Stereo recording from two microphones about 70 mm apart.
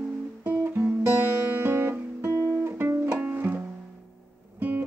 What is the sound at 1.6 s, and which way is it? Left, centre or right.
Guitar, right.